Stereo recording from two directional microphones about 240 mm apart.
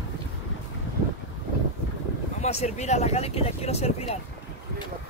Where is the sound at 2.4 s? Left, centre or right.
Left.